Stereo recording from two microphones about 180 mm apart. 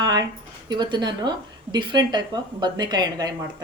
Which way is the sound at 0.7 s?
25° right (ahead or behind).